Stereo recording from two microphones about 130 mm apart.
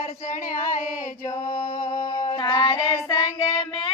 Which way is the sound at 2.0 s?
45° left (ahead or behind).